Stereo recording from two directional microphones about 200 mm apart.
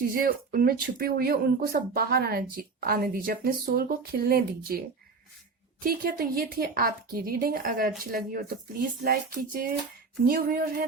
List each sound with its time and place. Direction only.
0.1 s speech: 45° right (ahead or behind)
5.8 s speech: 45° right (ahead or behind)